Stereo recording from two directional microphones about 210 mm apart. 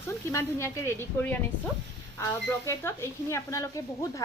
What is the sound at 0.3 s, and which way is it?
A woman's voice, 10° left (ahead or behind).